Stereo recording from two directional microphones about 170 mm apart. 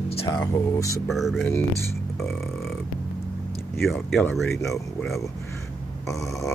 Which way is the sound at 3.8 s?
Centre (ahead or behind).